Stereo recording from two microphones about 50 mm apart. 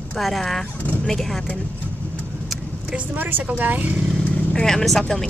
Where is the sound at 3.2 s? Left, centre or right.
Right.